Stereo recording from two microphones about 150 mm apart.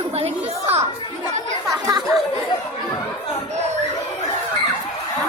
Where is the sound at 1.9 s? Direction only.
25° right (ahead or behind).